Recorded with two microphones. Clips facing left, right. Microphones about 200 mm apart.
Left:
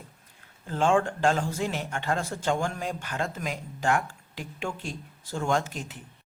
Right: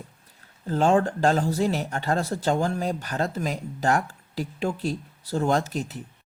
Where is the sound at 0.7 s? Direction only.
40° right (ahead or behind).